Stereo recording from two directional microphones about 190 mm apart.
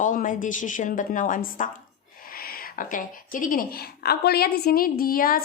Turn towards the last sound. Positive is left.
turn(degrees=50)  # may be behind; listen again after turning